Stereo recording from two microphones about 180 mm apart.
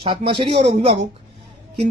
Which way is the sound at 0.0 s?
30° right (ahead or behind).